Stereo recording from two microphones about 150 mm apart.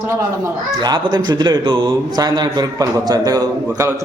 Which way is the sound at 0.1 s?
20° right (ahead or behind).